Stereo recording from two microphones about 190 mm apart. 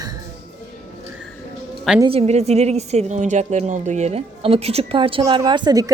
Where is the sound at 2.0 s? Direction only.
35° right (ahead or behind).